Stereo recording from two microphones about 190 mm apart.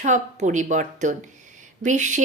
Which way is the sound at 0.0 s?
40° right (ahead or behind).